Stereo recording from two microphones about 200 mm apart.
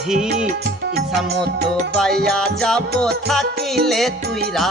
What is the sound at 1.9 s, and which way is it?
Music, centre (ahead or behind).